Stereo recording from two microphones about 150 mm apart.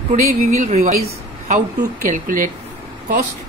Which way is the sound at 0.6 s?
50° right (ahead or behind).